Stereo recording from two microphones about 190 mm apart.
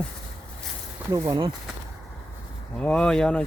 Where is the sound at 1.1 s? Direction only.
20° right (ahead or behind).